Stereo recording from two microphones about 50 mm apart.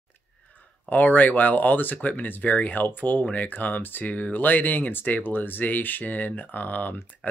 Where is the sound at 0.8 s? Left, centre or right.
Left.